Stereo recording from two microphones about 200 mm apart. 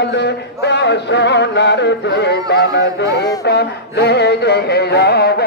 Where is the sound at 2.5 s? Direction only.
55° left (ahead or behind).